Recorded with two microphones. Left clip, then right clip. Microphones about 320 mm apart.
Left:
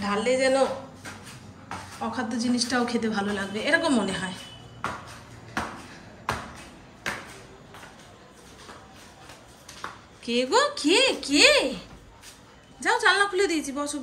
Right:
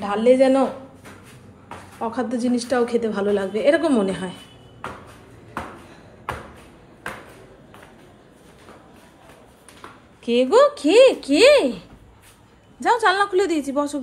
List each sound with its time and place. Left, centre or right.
0.0 s a woman's voice: centre
2.0 s a woman's voice: centre
10.2 s a woman's voice: centre
12.8 s a woman's voice: centre